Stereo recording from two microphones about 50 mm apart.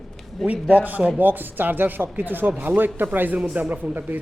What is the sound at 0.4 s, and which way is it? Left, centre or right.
A man's voice, right.